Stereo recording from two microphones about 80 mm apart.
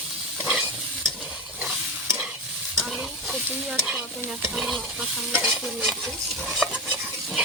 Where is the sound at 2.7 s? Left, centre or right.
Centre.